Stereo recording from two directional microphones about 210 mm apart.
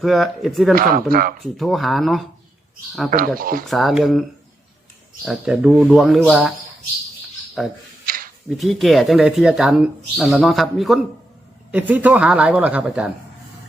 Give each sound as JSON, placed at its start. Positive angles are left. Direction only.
{"t": 0.0, "sound": "speech", "side_deg": 0}
{"t": 0.8, "sound": "speech", "side_deg": -45}
{"t": 1.4, "sound": "speech", "side_deg": 0}
{"t": 3.1, "sound": "speech", "side_deg": -45}
{"t": 3.7, "sound": "speech", "side_deg": 0}
{"t": 7.6, "sound": "speech", "side_deg": 0}
{"t": 8.0, "sound": "a sound", "side_deg": -45}
{"t": 8.4, "sound": "speech", "side_deg": 0}